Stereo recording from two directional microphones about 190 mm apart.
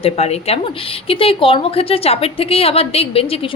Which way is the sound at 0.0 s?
35° left (ahead or behind).